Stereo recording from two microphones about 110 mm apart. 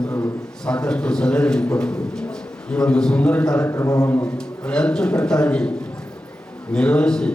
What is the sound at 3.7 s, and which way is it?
Speech, 30° left (ahead or behind).